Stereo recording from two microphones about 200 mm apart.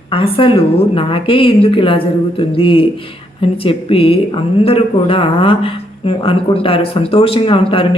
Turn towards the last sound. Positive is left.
turn(degrees=25)  # may be behind; listen again after turning